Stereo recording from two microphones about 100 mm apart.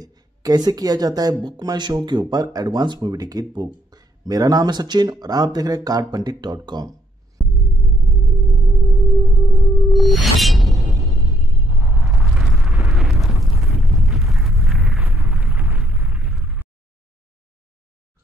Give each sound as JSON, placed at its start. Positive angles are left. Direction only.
{"t": 0.0, "sound": "speech", "side_deg": -40}
{"t": 7.4, "sound": "music", "side_deg": 0}
{"t": 11.2, "sound": "eruption", "side_deg": 0}
{"t": 15.4, "sound": "a sound", "side_deg": -20}
{"t": 15.9, "sound": "explosion", "side_deg": -5}